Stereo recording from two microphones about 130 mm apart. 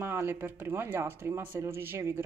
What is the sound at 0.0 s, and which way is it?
Speech, 20° right (ahead or behind).